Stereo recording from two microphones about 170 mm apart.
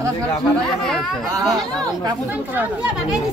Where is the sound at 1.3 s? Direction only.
20° right (ahead or behind).